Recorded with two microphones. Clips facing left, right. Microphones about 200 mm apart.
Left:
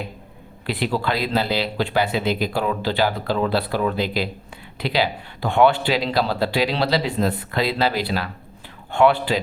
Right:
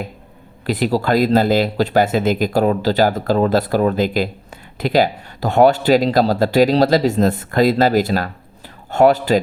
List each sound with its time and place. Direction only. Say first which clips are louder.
0.7 s speech: right 6 dB; 40° right (ahead or behind)